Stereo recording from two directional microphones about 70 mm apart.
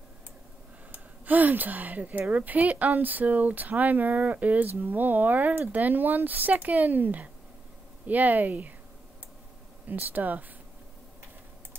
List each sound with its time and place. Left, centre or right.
0.9 s a woman's voice: right
9.8 s a woman's voice: right